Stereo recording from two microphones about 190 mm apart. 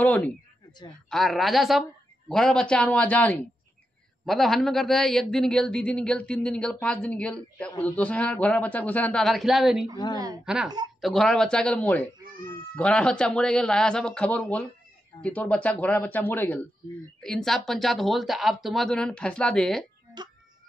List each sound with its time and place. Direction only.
0.0 s a man's voice: 10° left (ahead or behind)
20.2 s music: 25° right (ahead or behind)